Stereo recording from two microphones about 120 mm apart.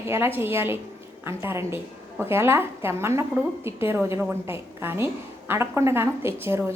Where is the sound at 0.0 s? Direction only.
20° right (ahead or behind).